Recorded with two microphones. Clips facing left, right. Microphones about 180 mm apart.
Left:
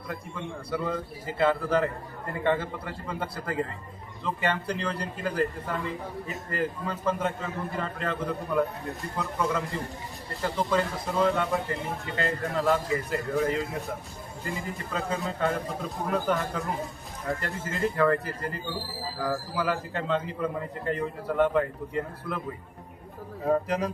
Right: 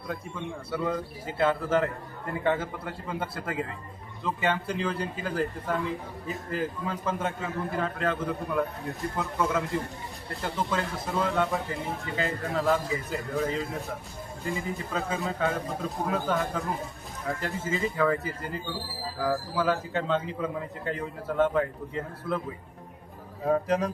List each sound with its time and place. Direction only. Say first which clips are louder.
1.4 s a man's voice: left 1 dB; centre (ahead or behind)
23.5 s a man's voice: right 1 dB; centre (ahead or behind)